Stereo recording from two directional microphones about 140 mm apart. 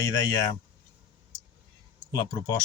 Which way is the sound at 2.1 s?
25° left (ahead or behind).